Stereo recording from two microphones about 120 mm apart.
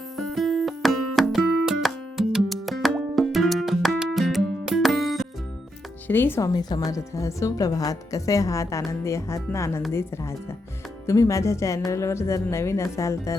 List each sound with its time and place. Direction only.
0.2 s music: centre (ahead or behind)
6.1 s speech: 15° left (ahead or behind)
6.4 s a woman's voice: 35° left (ahead or behind)
11.0 s a woman's voice: 25° left (ahead or behind)